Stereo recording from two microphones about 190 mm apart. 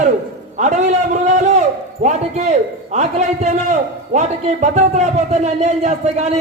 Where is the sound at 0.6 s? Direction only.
40° right (ahead or behind).